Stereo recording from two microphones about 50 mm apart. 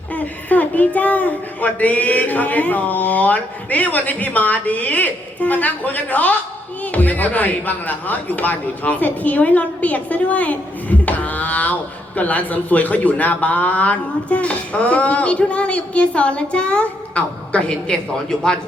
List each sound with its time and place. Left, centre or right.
0.1 s speech: left; by 18.5 s centre